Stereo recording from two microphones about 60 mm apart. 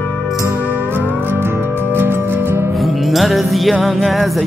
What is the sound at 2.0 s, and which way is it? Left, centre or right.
Music, right.